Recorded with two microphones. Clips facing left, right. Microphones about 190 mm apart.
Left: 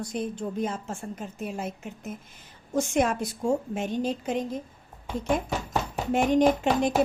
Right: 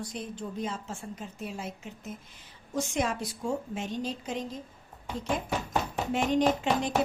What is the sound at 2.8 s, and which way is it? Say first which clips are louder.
Speech: left 5 dB; 50° left (ahead or behind).